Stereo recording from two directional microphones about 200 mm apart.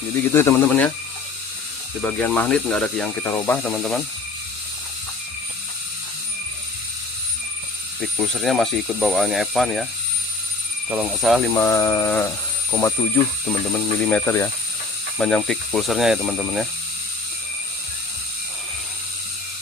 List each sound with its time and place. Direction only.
0.3 s speech: 10° left (ahead or behind)
2.0 s speech: 5° left (ahead or behind)
8.0 s speech: centre (ahead or behind)
10.8 s speech: 5° right (ahead or behind)
11.5 s speech: 15° left (ahead or behind)
13.4 s speech: 5° left (ahead or behind)
15.2 s speech: centre (ahead or behind)